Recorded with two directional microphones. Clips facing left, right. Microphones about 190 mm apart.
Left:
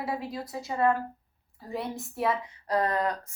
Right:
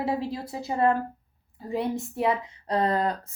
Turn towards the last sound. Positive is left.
turn(degrees=-30)  # may be behind; listen again after turning